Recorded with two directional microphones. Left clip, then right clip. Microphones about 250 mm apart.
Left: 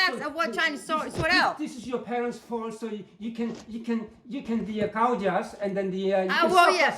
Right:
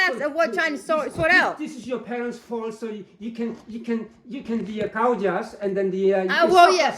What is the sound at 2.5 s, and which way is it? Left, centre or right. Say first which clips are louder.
Speech: right 5 dB; left.